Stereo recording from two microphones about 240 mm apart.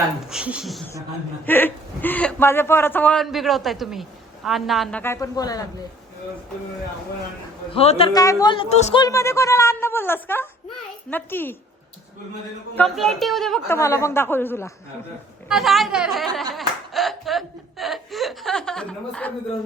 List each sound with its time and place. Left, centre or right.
0.3 s speech: centre
1.5 s a man's voice: centre
7.7 s speech: left
9.0 s a man's voice: centre
12.7 s speech: centre
13.7 s a man's voice: centre
15.4 s speech: centre